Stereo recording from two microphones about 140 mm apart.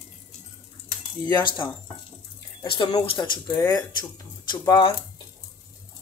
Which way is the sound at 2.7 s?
35° left (ahead or behind).